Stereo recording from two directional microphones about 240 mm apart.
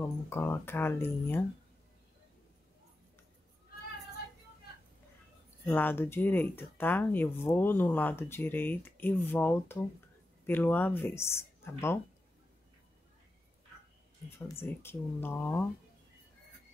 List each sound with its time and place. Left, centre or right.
0.0 s speech: centre
5.7 s speech: centre
14.6 s speech: centre